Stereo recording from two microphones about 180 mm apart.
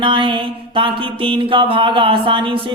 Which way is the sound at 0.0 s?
30° right (ahead or behind).